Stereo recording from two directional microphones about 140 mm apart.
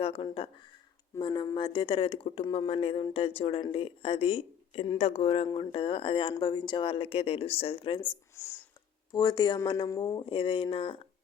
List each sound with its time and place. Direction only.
0.0 s speech: 45° left (ahead or behind)
1.2 s speech: 30° left (ahead or behind)
8.4 s speech: 15° left (ahead or behind)
9.1 s a woman's voice: 30° left (ahead or behind)
10.2 s speech: 40° left (ahead or behind)